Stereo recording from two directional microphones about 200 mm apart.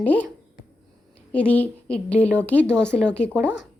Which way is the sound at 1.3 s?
5° left (ahead or behind).